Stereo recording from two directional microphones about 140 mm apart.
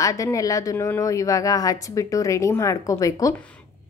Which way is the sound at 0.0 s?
25° left (ahead or behind).